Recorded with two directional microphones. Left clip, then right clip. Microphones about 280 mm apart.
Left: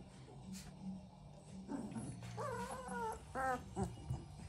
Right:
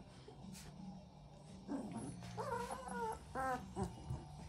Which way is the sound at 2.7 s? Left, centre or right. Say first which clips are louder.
Even; centre.